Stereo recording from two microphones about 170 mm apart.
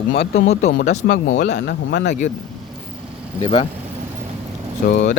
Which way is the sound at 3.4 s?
30° left (ahead or behind).